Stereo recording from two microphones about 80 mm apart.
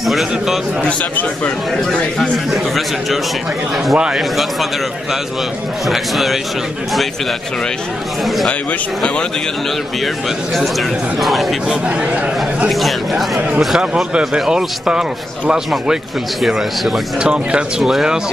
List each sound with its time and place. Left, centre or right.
0.0 s a man's voice: centre
0.8 s a man's voice: left
1.7 s a man's voice: centre
5.9 s a man's voice: centre
10.5 s a man's voice: centre